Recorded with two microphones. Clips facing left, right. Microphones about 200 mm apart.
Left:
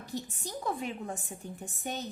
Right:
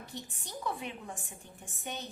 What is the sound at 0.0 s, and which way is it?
A woman's voice, 40° left (ahead or behind).